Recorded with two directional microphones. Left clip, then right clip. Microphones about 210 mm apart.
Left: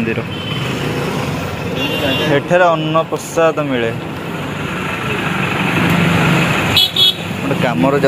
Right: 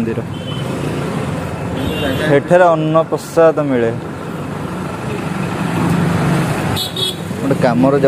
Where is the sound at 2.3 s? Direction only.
35° right (ahead or behind).